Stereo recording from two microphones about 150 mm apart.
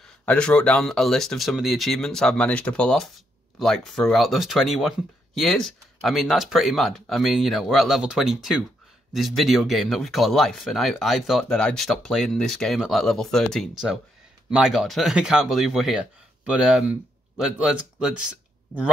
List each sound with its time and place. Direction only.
0.2 s speech: 5° left (ahead or behind)